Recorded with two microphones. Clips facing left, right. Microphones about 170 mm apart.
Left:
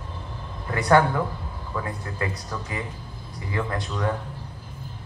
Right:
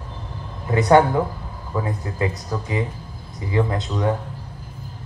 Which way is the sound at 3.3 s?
20° right (ahead or behind).